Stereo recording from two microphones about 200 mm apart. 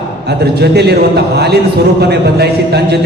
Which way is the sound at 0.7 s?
55° right (ahead or behind).